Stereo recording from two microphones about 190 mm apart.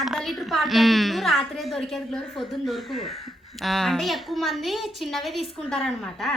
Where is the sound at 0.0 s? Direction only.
Centre (ahead or behind).